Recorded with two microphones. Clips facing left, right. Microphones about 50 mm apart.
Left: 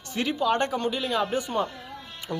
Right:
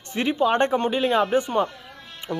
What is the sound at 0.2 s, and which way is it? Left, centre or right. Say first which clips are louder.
Speech: right 4 dB; right.